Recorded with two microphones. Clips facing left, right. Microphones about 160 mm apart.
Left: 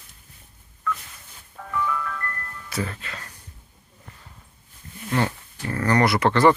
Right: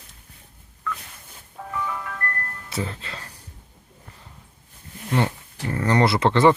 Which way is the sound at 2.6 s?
25° right (ahead or behind).